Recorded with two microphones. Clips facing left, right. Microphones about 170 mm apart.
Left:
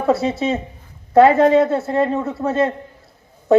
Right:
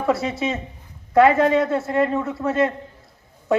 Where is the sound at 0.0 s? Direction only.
25° left (ahead or behind).